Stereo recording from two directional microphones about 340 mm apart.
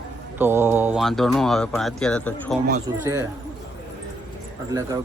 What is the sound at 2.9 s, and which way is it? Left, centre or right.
Speech, centre.